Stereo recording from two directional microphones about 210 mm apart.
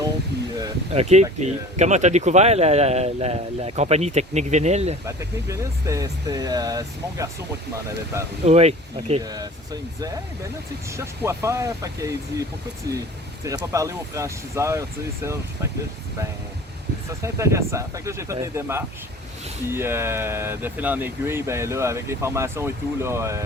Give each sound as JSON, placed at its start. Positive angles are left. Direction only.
{"t": 0.9, "sound": "speech", "side_deg": -30}
{"t": 5.0, "sound": "speech", "side_deg": -15}
{"t": 8.4, "sound": "speech", "side_deg": -30}
{"t": 9.2, "sound": "speech", "side_deg": -20}
{"t": 10.9, "sound": "speech", "side_deg": -10}
{"t": 17.1, "sound": "speech", "side_deg": -15}